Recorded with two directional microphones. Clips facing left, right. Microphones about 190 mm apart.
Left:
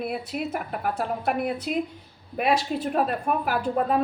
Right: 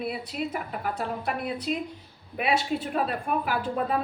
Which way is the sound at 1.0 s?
55° left (ahead or behind).